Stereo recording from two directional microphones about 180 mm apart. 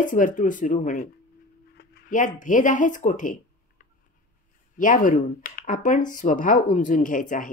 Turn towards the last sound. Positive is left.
turn(degrees=50)  # may be behind; listen again after turning